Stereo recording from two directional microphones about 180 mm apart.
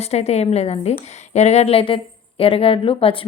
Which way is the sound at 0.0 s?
35° left (ahead or behind).